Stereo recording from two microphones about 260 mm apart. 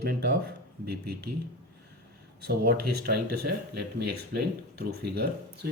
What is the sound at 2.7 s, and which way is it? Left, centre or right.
Speech, right.